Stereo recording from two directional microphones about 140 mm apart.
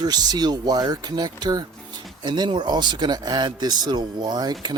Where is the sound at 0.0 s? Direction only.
30° right (ahead or behind).